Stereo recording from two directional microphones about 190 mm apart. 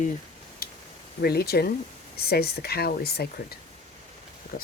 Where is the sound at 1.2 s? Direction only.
55° left (ahead or behind).